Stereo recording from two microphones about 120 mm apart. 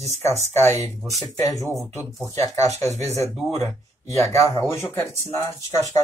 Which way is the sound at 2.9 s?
65° right (ahead or behind).